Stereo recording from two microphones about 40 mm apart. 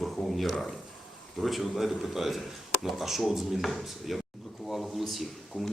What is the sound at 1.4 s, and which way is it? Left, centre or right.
A man's voice, centre.